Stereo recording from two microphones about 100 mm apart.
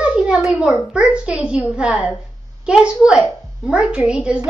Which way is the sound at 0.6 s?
10° right (ahead or behind).